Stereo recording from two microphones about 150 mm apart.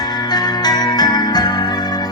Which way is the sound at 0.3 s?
25° left (ahead or behind).